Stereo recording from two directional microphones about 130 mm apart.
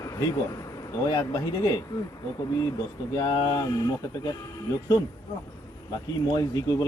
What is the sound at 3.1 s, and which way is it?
Speech, 30° left (ahead or behind).